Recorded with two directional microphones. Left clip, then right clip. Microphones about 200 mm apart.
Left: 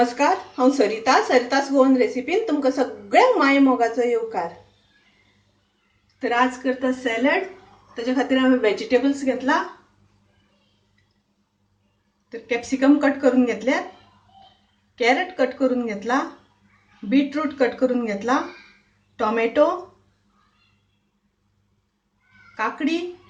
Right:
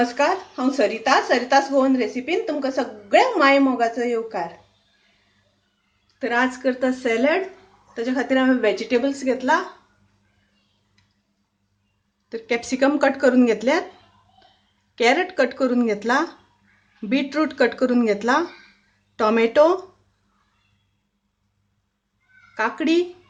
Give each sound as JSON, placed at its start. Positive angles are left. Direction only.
{"t": 0.0, "sound": "speech", "side_deg": -30}
{"t": 6.1, "sound": "speech", "side_deg": -40}
{"t": 12.3, "sound": "speech", "side_deg": -45}
{"t": 14.9, "sound": "speech", "side_deg": -45}
{"t": 22.5, "sound": "speech", "side_deg": -45}